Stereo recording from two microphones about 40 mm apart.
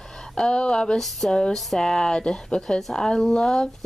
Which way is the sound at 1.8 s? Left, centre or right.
Centre.